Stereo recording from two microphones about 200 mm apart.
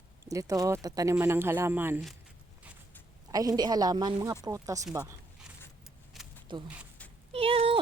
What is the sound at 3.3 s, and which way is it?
Speech, 20° right (ahead or behind).